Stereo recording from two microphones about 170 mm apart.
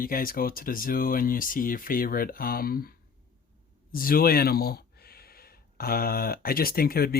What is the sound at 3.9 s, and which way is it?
Speech, 60° left (ahead or behind).